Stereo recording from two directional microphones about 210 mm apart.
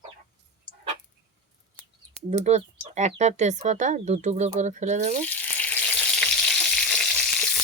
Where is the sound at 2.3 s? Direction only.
30° right (ahead or behind).